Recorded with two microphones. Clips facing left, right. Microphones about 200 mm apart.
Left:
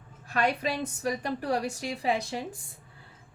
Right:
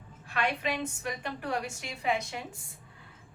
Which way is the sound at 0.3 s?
40° left (ahead or behind).